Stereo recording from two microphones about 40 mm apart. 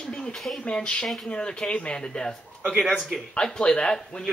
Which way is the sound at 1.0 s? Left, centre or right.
Centre.